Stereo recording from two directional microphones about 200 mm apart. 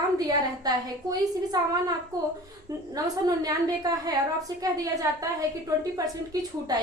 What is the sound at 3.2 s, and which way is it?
A woman's voice, 20° right (ahead or behind).